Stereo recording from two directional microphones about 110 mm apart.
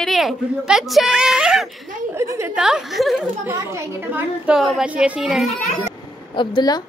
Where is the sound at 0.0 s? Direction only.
Centre (ahead or behind).